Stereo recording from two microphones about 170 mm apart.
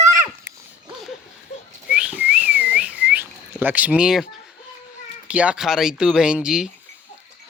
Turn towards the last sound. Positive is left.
turn(degrees=-5)  # may be behind; listen again after turning